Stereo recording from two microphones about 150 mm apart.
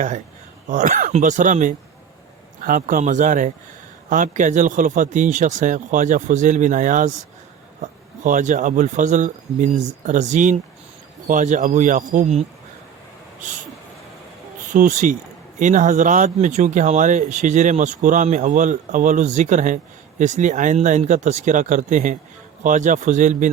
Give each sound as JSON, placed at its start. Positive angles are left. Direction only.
{"t": 0.7, "sound": "speech", "side_deg": -55}
{"t": 13.4, "sound": "a sound", "side_deg": -55}
{"t": 14.7, "sound": "speech", "side_deg": -55}